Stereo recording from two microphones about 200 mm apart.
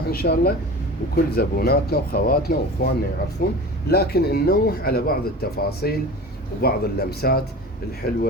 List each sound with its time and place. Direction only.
0.1 s speech: 50° left (ahead or behind)